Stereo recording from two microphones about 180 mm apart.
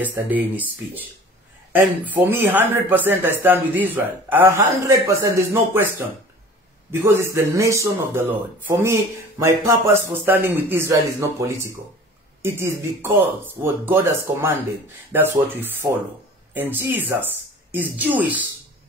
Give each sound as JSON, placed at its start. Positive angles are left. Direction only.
{"t": 0.0, "sound": "speech", "side_deg": -10}